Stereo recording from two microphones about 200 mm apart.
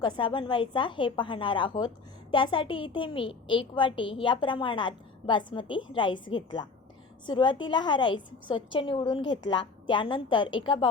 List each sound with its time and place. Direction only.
0.0 s a woman's voice: 25° left (ahead or behind)